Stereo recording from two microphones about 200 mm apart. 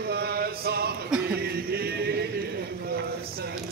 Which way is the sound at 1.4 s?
50° right (ahead or behind).